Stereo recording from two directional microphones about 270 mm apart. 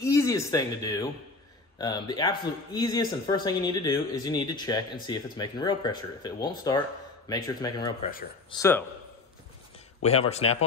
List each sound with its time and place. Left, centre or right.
0.0 s speech: centre
10.0 s speech: left